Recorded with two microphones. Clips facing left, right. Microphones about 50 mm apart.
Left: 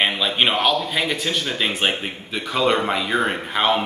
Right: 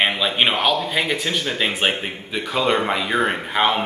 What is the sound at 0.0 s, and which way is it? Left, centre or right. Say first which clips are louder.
A man's voice: right 1 dB; centre.